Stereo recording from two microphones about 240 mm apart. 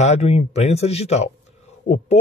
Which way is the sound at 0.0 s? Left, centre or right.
Left.